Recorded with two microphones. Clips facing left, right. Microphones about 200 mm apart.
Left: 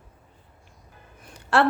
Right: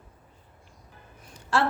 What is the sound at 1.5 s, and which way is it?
Speech, 65° left (ahead or behind).